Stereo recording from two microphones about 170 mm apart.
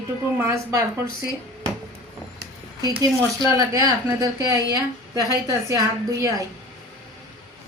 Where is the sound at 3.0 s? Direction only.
20° right (ahead or behind).